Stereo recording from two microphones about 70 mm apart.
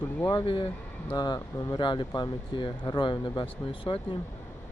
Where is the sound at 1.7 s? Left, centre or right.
Left.